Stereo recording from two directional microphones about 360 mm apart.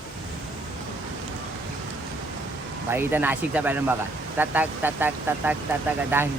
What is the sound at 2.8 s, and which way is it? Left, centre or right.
Speech, centre.